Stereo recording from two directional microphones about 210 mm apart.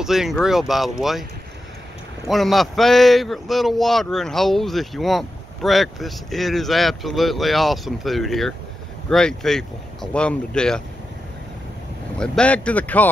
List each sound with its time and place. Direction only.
0.0 s a man's voice: centre (ahead or behind)
2.2 s a man's voice: centre (ahead or behind)
12.2 s speech: 5° left (ahead or behind)